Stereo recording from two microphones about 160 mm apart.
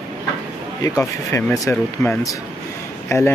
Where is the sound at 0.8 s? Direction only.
20° left (ahead or behind).